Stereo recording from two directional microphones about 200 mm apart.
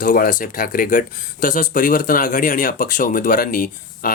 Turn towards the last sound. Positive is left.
turn(degrees=45)  # may be behind; listen again after turning